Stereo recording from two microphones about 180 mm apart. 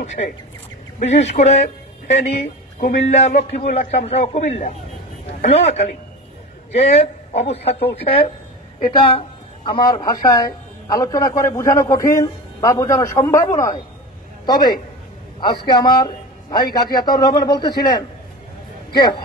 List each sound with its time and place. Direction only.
0.0 s a man's voice: 40° left (ahead or behind)
18.9 s a man's voice: 25° left (ahead or behind)